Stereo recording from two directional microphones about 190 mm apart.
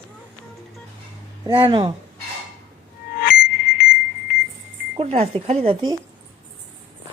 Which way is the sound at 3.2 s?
50° left (ahead or behind).